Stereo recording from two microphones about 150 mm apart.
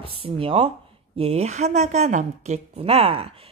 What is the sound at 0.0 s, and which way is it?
A woman's voice, 40° right (ahead or behind).